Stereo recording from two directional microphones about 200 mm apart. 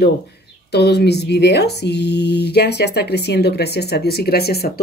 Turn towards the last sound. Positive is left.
turn(degrees=50)  # may be behind; listen again after turning